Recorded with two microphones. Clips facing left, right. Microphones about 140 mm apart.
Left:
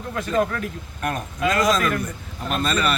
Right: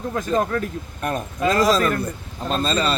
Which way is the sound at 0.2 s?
35° right (ahead or behind).